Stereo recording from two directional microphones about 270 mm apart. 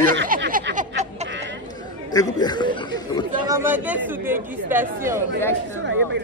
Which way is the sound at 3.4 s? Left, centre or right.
Centre.